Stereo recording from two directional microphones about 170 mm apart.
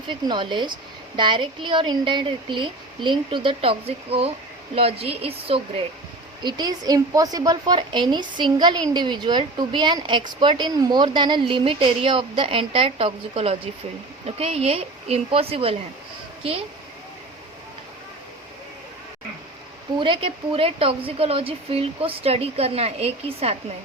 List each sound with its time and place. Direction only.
0.1 s a woman's voice: 30° right (ahead or behind)
6.4 s a woman's voice: 25° right (ahead or behind)
20.0 s speech: 30° right (ahead or behind)